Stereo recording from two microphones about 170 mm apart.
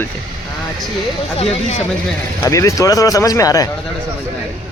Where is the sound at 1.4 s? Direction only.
40° left (ahead or behind).